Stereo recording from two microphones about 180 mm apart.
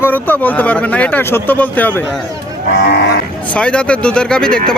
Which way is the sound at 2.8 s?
65° left (ahead or behind).